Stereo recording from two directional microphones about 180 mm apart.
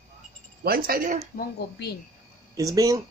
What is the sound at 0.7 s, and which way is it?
Speech, 55° right (ahead or behind).